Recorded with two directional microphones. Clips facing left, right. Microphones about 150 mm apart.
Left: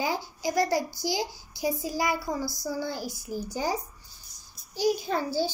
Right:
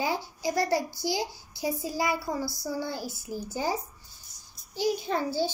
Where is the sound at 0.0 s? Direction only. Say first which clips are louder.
Even; 25° right (ahead or behind).